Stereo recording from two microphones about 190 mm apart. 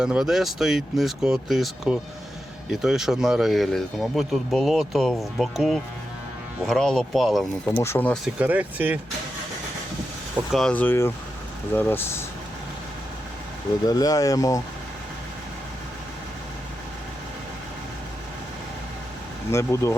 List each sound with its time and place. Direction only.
0.0 s speech: 5° right (ahead or behind)
7.8 s speech: 10° left (ahead or behind)
8.2 s speech: 5° right (ahead or behind)
10.5 s speech: 5° left (ahead or behind)
13.8 s speech: 20° left (ahead or behind)
19.5 s speech: 15° left (ahead or behind)